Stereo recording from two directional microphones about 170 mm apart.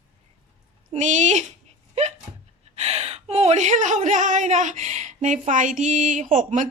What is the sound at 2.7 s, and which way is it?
Speech, 40° right (ahead or behind).